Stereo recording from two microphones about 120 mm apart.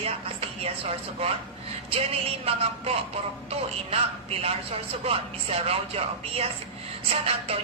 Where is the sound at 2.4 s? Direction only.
55° right (ahead or behind).